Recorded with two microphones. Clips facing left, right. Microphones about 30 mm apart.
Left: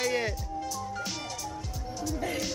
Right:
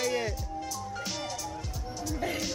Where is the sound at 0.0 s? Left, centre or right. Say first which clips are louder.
Left 1 dB; centre.